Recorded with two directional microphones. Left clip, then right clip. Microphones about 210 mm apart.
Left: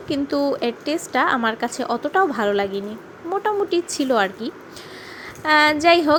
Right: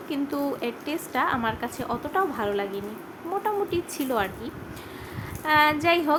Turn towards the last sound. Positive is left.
turn(degrees=25)  # may be behind; listen again after turning